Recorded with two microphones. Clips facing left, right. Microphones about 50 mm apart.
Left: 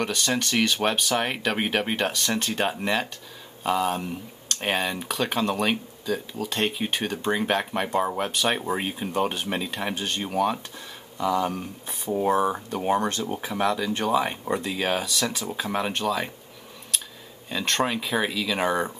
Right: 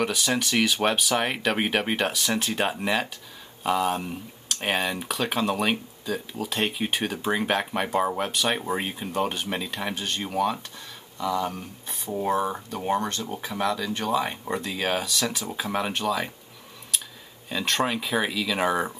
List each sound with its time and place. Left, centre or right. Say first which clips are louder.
0.0 s speech: right 1 dB; centre
17.5 s speech: even; centre